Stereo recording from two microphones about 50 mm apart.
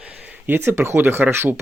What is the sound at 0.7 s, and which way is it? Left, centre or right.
Speech, right.